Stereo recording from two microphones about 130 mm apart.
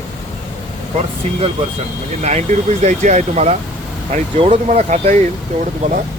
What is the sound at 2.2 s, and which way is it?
Speech, 65° right (ahead or behind).